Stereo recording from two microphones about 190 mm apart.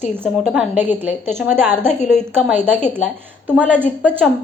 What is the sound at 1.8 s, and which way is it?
Speech, 35° left (ahead or behind).